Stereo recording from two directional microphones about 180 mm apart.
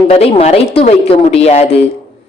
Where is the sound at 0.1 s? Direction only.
35° left (ahead or behind).